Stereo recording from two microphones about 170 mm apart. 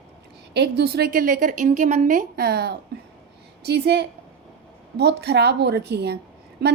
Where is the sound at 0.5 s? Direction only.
75° right (ahead or behind).